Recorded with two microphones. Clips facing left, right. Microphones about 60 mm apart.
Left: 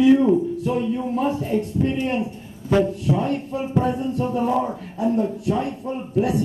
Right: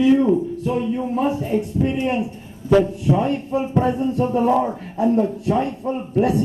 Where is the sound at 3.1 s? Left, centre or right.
Right.